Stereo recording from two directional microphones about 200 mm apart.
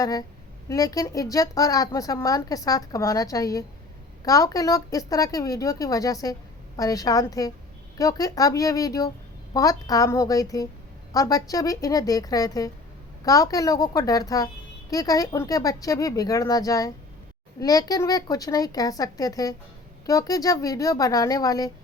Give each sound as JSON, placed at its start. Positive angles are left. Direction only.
{"t": 0.0, "sound": "a woman's voice", "side_deg": 20}